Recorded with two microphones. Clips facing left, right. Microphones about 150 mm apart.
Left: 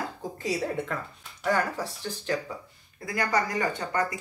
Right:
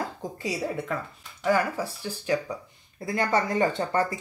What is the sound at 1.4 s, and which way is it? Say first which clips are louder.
Speech: right 2 dB; 10° right (ahead or behind).